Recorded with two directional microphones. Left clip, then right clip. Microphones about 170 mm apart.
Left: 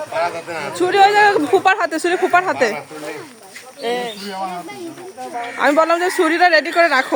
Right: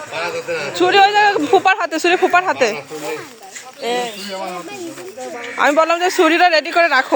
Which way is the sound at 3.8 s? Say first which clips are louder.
Right 1 dB; 5° right (ahead or behind).